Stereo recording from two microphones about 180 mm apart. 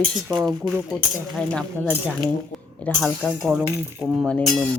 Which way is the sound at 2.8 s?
10° left (ahead or behind).